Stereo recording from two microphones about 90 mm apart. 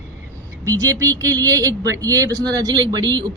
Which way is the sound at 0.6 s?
40° right (ahead or behind).